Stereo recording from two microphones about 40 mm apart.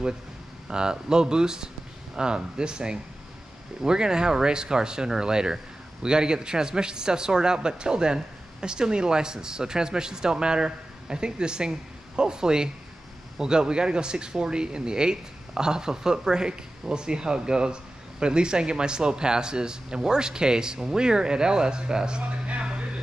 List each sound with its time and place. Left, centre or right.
0.7 s a man's voice: centre
22.6 s music: right